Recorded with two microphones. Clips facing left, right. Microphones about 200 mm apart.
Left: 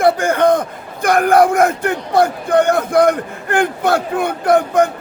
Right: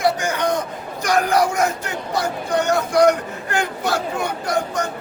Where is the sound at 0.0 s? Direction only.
55° left (ahead or behind).